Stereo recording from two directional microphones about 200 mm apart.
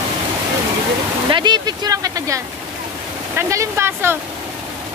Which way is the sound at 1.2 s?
20° right (ahead or behind).